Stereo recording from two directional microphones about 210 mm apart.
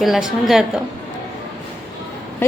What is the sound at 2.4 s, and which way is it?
Speech, 10° left (ahead or behind).